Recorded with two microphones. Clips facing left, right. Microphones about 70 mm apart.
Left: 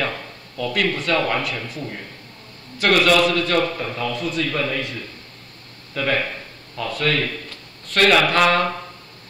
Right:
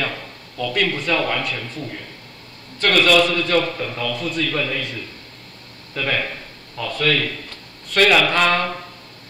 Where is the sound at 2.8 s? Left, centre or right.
Centre.